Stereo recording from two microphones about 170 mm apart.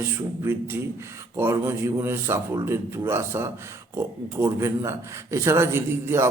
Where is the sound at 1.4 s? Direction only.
15° right (ahead or behind).